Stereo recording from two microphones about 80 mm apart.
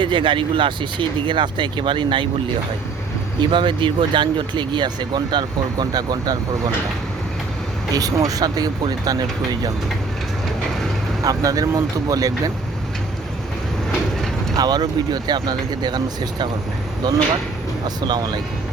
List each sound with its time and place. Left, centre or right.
0.0 s speech: right
3.4 s speech: right
7.9 s speech: right
11.2 s speech: right
14.5 s speech: right
17.8 s speech: right